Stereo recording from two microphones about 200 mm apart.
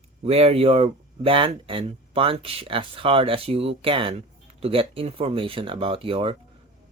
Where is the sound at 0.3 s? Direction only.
30° right (ahead or behind).